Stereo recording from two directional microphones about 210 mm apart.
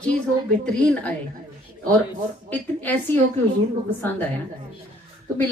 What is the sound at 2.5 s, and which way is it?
Speech, 10° left (ahead or behind).